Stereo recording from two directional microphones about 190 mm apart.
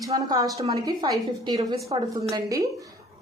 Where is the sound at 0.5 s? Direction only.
35° right (ahead or behind).